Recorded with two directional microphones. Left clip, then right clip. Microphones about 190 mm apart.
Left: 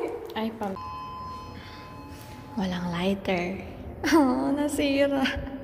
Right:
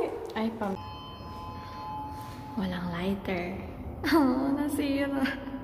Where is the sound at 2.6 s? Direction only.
15° left (ahead or behind).